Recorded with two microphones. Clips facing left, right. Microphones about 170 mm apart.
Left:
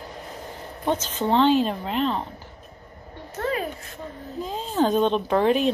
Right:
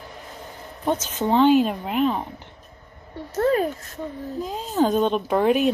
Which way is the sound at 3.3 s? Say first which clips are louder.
Right 7 dB; 40° right (ahead or behind).